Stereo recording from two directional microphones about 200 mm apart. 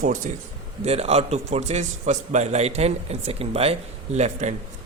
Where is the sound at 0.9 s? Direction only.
30° right (ahead or behind).